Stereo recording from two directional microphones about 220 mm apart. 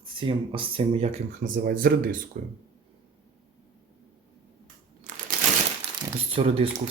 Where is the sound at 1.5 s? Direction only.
40° right (ahead or behind).